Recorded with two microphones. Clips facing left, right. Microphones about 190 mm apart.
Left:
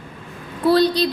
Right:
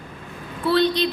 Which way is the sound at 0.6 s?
35° left (ahead or behind).